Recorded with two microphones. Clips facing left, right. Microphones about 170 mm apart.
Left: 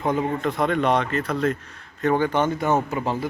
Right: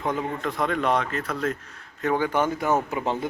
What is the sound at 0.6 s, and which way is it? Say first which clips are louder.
Speech: left 2 dB; centre (ahead or behind).